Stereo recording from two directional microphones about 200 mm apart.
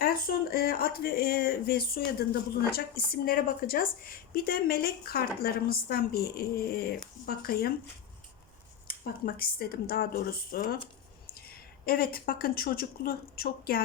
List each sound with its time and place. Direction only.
0.0 s speech: 45° left (ahead or behind)
8.9 s speech: 50° left (ahead or behind)